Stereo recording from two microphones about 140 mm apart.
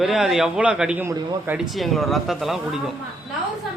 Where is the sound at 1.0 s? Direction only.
30° right (ahead or behind).